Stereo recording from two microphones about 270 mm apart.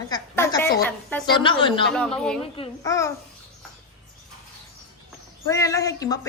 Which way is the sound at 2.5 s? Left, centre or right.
Centre.